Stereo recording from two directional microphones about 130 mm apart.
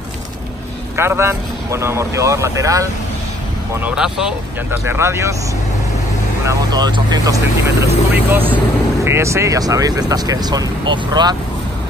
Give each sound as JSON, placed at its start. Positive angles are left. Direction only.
{"t": 0.9, "sound": "speech", "side_deg": -20}
{"t": 3.9, "sound": "speech", "side_deg": -5}
{"t": 4.6, "sound": "speech", "side_deg": -20}
{"t": 6.4, "sound": "speech", "side_deg": -30}
{"t": 8.1, "sound": "speech", "side_deg": -15}